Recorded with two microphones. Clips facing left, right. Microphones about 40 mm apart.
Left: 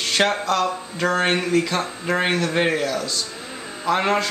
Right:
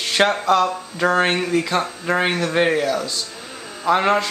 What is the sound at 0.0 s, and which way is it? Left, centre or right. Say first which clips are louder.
Speech: right 2 dB; centre.